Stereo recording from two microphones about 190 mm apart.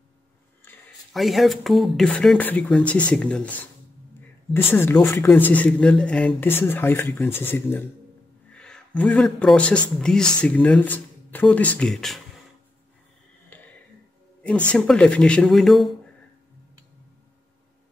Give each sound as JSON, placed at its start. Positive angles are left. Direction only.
{"t": 0.7, "sound": "a sound", "side_deg": 10}
{"t": 1.1, "sound": "speech", "side_deg": 0}
{"t": 4.6, "sound": "a man's voice", "side_deg": 10}
{"t": 13.5, "sound": "music", "side_deg": 10}
{"t": 14.4, "sound": "speech", "side_deg": 5}